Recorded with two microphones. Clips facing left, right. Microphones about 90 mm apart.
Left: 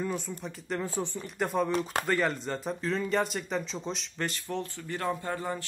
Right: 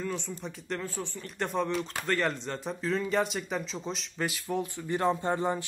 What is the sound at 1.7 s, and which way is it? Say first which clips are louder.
Speech: left 3 dB; 45° left (ahead or behind).